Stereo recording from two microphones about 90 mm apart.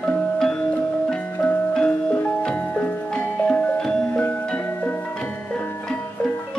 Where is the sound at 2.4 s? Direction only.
10° left (ahead or behind).